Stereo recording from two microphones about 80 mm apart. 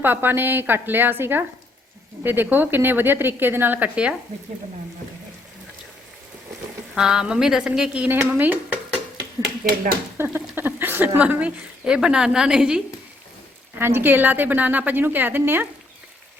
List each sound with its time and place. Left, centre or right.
0.0 s speech: right
6.9 s speech: centre
8.3 s speech: right
10.2 s a sound: right
10.5 s speech: right; by 12.8 s centre
13.7 s speech: right